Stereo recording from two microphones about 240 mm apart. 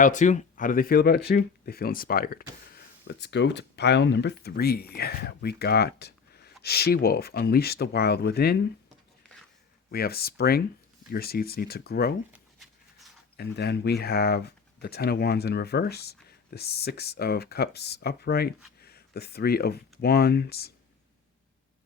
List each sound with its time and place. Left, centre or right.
0.0 s speech: left
9.9 s speech: left
12.3 s a sound: centre
13.3 s speech: left